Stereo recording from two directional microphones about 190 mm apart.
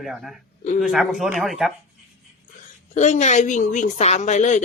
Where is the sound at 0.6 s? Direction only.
40° left (ahead or behind).